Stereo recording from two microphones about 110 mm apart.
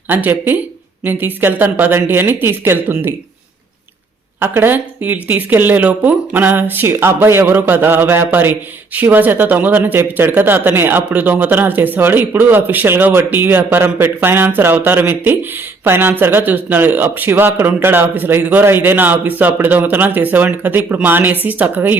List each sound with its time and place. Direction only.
0.1 s speech: 15° right (ahead or behind)
4.4 s speech: 20° right (ahead or behind)